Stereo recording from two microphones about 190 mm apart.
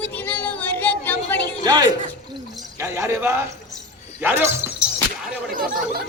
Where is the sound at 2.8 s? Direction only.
15° right (ahead or behind).